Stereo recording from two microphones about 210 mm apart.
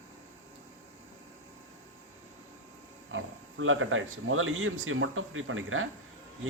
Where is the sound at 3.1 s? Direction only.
70° right (ahead or behind).